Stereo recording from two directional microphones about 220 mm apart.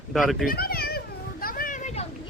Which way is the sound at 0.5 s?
45° left (ahead or behind).